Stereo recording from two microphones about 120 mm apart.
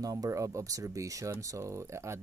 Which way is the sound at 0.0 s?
30° right (ahead or behind).